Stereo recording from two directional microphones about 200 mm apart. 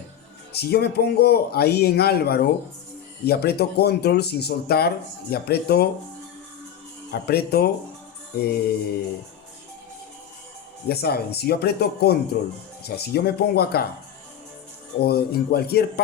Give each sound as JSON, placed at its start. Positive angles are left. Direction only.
{"t": 0.5, "sound": "speech", "side_deg": 55}
{"t": 7.1, "sound": "speech", "side_deg": 50}
{"t": 10.8, "sound": "speech", "side_deg": 50}
{"t": 15.0, "sound": "speech", "side_deg": 50}